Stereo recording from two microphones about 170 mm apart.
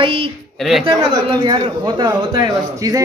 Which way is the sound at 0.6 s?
Centre (ahead or behind).